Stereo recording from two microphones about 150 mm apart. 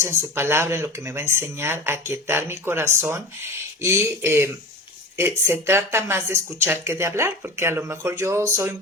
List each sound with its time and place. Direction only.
0.0 s speech: 15° right (ahead or behind)